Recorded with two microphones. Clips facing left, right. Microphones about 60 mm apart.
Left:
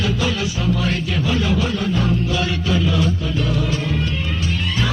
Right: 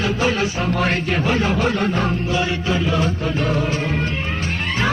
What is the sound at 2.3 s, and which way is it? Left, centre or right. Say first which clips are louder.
Music: even; right.